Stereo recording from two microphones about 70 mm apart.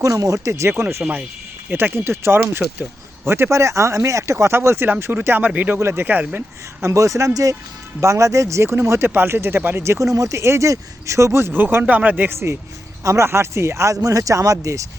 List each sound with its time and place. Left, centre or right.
0.0 s speech: right
6.8 s speech: right
12.3 s speech: right
13.9 s speech: right